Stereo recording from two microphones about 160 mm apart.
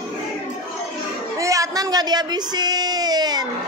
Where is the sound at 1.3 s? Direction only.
20° right (ahead or behind).